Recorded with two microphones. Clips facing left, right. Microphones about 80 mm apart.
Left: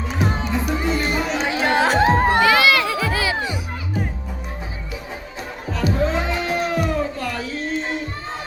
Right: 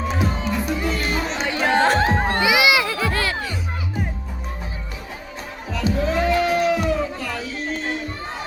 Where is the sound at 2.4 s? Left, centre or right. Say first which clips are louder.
Left 2 dB; centre.